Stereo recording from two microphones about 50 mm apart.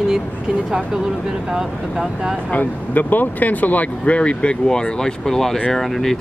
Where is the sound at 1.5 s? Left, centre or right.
Centre.